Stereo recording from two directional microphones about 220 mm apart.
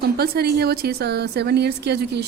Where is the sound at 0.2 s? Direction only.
45° right (ahead or behind).